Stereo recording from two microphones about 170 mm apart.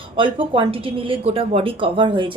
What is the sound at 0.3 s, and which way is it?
A woman's voice, 30° right (ahead or behind).